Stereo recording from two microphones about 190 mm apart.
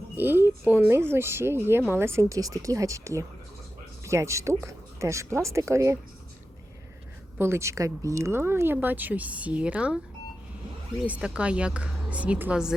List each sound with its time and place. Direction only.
0.2 s a woman's voice: 10° right (ahead or behind)
7.3 s a woman's voice: 15° right (ahead or behind)
11.0 s a woman's voice: 5° right (ahead or behind)